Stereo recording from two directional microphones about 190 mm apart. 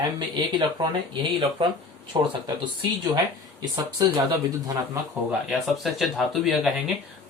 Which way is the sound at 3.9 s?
20° right (ahead or behind).